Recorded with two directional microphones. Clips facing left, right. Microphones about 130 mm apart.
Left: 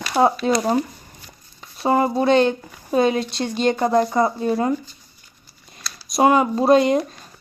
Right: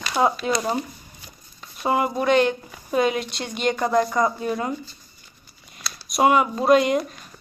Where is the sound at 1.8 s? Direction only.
35° left (ahead or behind).